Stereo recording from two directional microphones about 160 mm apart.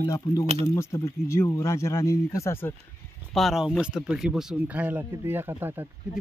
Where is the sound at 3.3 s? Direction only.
Centre (ahead or behind).